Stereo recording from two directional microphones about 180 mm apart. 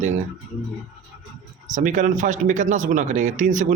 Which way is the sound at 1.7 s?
45° right (ahead or behind).